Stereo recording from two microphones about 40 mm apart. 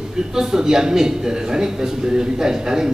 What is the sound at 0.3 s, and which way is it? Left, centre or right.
A man's voice, centre.